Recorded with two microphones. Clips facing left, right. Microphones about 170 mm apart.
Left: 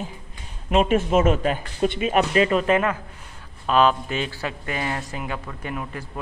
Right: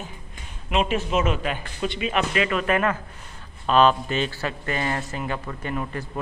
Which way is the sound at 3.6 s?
5° left (ahead or behind).